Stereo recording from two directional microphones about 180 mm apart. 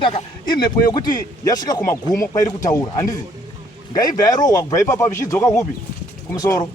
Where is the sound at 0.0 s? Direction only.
25° left (ahead or behind).